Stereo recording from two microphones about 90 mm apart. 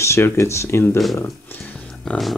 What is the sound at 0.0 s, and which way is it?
Speech, 30° left (ahead or behind).